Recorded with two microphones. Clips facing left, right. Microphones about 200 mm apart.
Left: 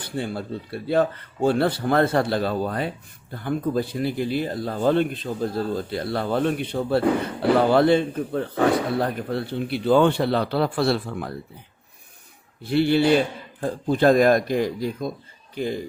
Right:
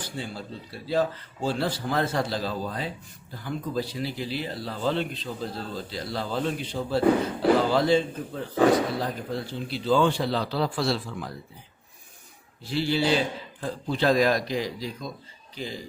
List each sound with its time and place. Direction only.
0.0 s a man's voice: 60° left (ahead or behind)
12.6 s a man's voice: 60° left (ahead or behind)